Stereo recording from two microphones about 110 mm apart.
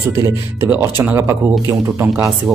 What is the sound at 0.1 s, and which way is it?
Speech, 25° right (ahead or behind).